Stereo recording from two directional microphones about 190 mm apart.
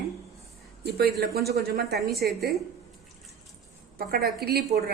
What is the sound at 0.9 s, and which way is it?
Speech, 55° right (ahead or behind).